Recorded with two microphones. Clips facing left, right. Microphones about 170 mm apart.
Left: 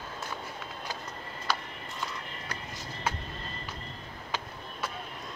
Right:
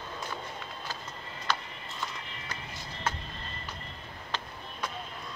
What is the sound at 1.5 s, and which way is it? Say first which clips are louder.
Music: even; 10° left (ahead or behind).